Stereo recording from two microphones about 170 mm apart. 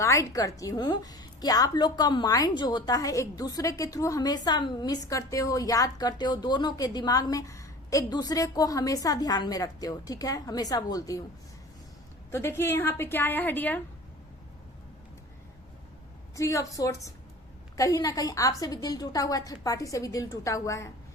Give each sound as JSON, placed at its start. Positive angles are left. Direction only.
{"t": 0.0, "sound": "a woman's voice", "side_deg": 15}
{"t": 12.3, "sound": "a woman's voice", "side_deg": 15}
{"t": 16.3, "sound": "a woman's voice", "side_deg": 20}